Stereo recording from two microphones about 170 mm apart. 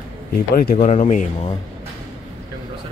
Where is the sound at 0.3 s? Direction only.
60° left (ahead or behind); by 1.5 s 45° left (ahead or behind).